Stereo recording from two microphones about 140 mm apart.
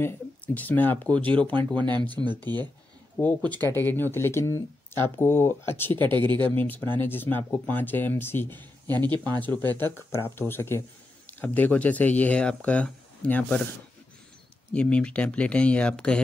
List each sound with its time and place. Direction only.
0.6 s speech: 10° left (ahead or behind)
1.9 s speech: 30° right (ahead or behind)
3.2 s speech: 10° left (ahead or behind)
6.1 s speech: 35° right (ahead or behind)
6.5 s speech: 15° left (ahead or behind)
9.1 s speech: 30° right (ahead or behind)
9.7 s speech: 15° left (ahead or behind)
14.7 s speech: 10° left (ahead or behind)